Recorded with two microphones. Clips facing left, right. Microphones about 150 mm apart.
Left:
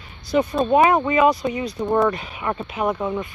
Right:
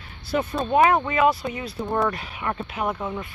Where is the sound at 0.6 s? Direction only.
5° left (ahead or behind).